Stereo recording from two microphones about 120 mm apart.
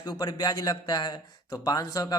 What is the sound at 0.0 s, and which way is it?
A man's voice, 35° left (ahead or behind).